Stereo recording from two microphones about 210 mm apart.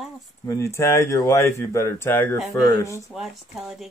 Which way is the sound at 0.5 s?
15° left (ahead or behind).